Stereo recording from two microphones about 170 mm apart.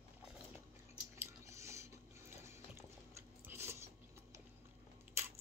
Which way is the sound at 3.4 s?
15° right (ahead or behind).